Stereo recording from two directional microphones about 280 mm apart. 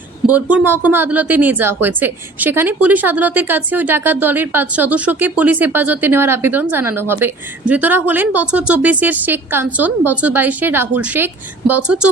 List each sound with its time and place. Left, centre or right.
0.3 s a woman's voice: centre